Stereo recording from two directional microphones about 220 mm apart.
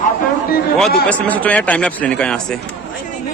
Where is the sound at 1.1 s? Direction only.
5° left (ahead or behind).